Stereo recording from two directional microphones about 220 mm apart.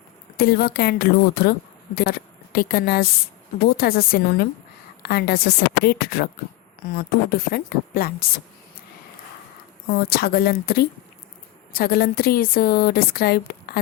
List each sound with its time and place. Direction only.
0.3 s a woman's voice: 45° left (ahead or behind)
9.9 s a woman's voice: 45° left (ahead or behind)